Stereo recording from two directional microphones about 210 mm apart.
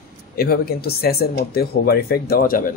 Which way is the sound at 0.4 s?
45° left (ahead or behind).